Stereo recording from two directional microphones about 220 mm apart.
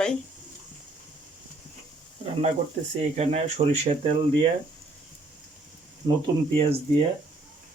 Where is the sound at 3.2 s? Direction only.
30° right (ahead or behind).